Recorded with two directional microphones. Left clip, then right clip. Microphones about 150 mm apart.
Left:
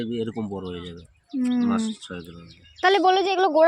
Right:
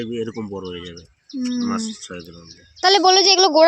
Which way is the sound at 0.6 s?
45° left (ahead or behind).